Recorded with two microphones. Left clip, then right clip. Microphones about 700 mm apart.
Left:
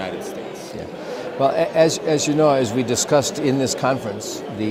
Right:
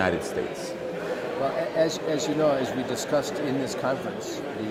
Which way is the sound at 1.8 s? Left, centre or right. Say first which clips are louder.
Left 7 dB; left.